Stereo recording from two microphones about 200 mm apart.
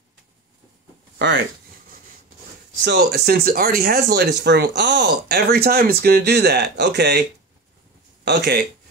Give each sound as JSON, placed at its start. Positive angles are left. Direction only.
{"t": 1.1, "sound": "a sound", "side_deg": -60}
{"t": 2.8, "sound": "speech", "side_deg": -55}
{"t": 8.3, "sound": "speech", "side_deg": -55}